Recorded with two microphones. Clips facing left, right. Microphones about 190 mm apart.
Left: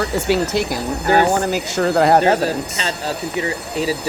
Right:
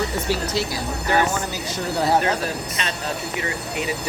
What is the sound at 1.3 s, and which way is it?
Speech, 65° left (ahead or behind).